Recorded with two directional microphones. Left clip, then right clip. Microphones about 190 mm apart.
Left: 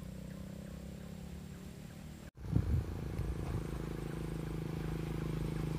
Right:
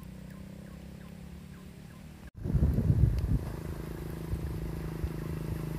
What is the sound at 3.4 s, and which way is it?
Vehicle, 55° right (ahead or behind).